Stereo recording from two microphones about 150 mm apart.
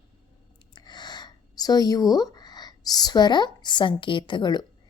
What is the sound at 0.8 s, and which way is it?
A woman's voice, 30° left (ahead or behind).